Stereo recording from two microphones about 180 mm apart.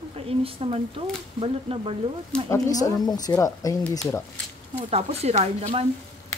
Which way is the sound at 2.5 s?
20° left (ahead or behind).